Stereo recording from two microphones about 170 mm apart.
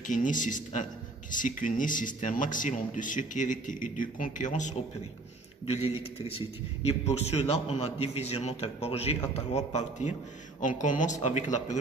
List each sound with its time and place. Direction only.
0.0 s speech: 50° left (ahead or behind)
6.1 s a man's voice: 35° left (ahead or behind)